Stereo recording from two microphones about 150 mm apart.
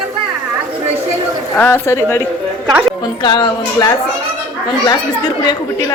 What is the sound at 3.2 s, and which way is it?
Speech, 30° left (ahead or behind).